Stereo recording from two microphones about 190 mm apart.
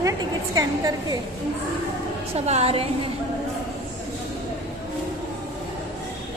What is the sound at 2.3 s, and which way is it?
Speech, 35° right (ahead or behind).